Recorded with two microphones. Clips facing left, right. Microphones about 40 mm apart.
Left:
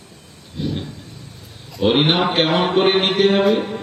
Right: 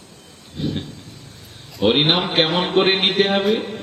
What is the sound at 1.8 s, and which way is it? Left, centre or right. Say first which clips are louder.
A man's voice: left 1 dB; centre.